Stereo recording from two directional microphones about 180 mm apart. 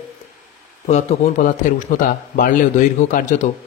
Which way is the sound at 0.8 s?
40° left (ahead or behind).